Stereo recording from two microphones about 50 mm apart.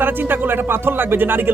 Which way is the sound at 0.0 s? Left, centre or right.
Right.